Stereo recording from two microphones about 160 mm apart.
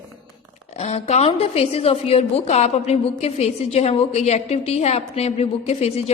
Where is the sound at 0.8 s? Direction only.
40° left (ahead or behind).